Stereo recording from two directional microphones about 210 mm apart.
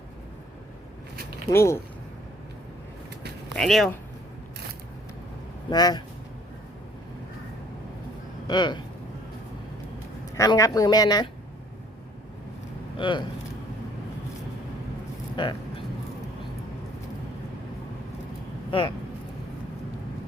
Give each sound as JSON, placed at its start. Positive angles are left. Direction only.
{"t": 1.1, "sound": "a sound", "side_deg": -45}
{"t": 1.5, "sound": "speech", "side_deg": 10}
{"t": 3.5, "sound": "speech", "side_deg": 0}
{"t": 5.7, "sound": "speech", "side_deg": 20}
{"t": 8.4, "sound": "speech", "side_deg": 20}
{"t": 10.3, "sound": "speech", "side_deg": 15}
{"t": 13.0, "sound": "speech", "side_deg": 25}
{"t": 15.4, "sound": "speech", "side_deg": 20}